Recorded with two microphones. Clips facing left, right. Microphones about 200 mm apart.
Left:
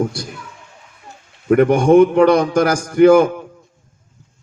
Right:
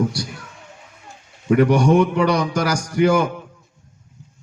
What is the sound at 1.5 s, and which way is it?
A man's voice, 50° left (ahead or behind).